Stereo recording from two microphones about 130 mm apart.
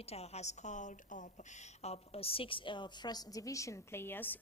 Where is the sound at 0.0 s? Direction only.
55° left (ahead or behind); by 1.2 s 70° left (ahead or behind).